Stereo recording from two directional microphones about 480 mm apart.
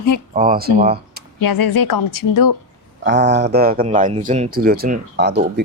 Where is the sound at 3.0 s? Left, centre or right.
Right.